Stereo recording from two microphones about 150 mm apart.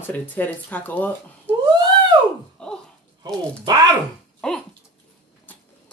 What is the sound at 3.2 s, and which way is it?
Speech, 25° right (ahead or behind).